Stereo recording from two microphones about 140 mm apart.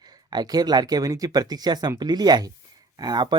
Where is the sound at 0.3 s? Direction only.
30° right (ahead or behind).